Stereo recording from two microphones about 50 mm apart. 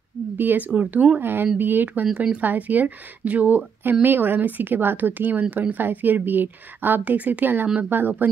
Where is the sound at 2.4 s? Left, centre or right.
Right.